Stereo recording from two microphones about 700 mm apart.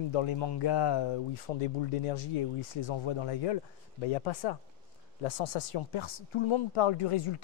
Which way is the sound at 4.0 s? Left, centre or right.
Left.